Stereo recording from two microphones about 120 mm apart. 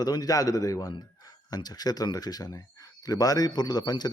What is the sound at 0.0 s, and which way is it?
A man's voice, 35° left (ahead or behind).